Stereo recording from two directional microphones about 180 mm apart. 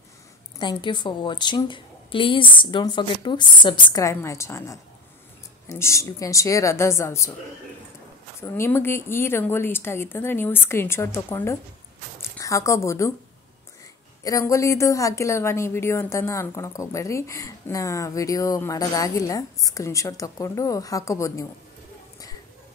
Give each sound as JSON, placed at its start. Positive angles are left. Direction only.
{"t": 0.6, "sound": "a woman's voice", "side_deg": 25}
{"t": 8.4, "sound": "a woman's voice", "side_deg": 15}
{"t": 14.2, "sound": "a woman's voice", "side_deg": 20}